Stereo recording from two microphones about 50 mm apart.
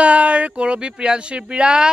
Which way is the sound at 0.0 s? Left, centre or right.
Right.